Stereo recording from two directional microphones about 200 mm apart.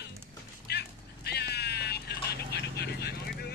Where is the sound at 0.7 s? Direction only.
55° left (ahead or behind).